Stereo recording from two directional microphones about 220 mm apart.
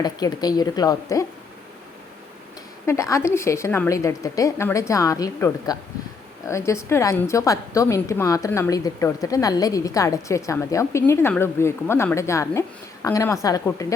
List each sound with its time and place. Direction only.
0.0 s a woman's voice: 20° left (ahead or behind)
2.8 s a woman's voice: 15° left (ahead or behind)